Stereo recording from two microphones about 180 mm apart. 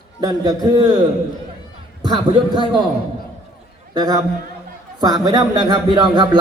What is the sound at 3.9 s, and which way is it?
A man's voice, 20° right (ahead or behind).